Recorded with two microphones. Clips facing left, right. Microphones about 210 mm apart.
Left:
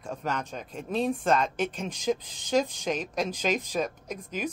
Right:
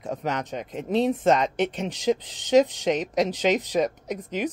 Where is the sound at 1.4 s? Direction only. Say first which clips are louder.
Right 5 dB; 75° right (ahead or behind).